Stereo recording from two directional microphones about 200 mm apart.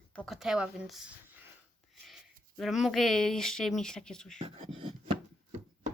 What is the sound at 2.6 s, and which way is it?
Speech, centre (ahead or behind).